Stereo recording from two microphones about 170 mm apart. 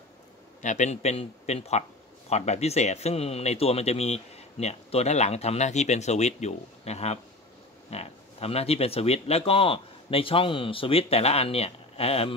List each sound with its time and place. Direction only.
0.6 s speech: 45° left (ahead or behind)